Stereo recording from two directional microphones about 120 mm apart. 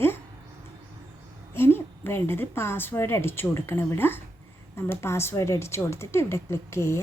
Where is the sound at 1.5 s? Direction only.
20° left (ahead or behind).